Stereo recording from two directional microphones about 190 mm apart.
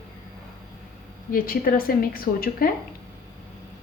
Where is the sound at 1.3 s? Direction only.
50° left (ahead or behind).